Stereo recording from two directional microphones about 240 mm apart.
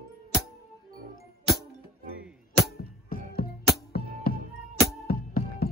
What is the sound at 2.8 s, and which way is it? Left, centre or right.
Music, left.